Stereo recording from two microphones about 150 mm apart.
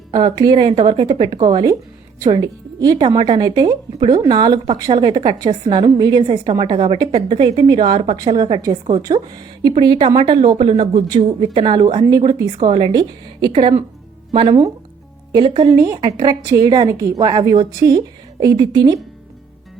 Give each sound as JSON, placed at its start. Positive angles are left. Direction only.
{"t": 0.1, "sound": "speech", "side_deg": -30}